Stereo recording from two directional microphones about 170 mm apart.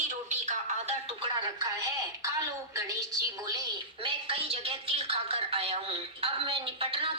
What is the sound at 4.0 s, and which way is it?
A woman's voice, 35° right (ahead or behind).